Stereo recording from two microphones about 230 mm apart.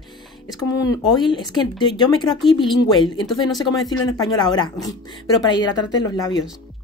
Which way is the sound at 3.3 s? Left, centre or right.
Centre.